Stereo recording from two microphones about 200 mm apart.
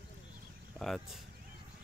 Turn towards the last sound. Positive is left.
turn(degrees=0)  # may be behind; listen again after turning